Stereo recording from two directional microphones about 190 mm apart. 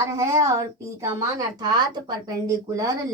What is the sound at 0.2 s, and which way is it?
Speech, 15° right (ahead or behind).